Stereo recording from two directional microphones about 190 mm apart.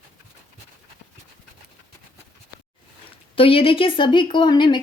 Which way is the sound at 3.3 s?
30° left (ahead or behind).